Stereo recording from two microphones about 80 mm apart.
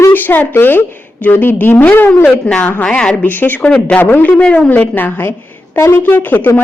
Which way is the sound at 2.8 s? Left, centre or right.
Centre.